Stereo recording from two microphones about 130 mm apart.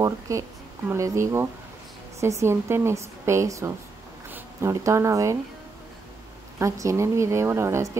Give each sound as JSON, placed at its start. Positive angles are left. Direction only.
{"t": 0.0, "sound": "speech", "side_deg": -25}
{"t": 6.6, "sound": "speech", "side_deg": -25}